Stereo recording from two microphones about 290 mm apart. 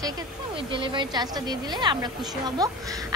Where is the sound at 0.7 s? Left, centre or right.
Centre.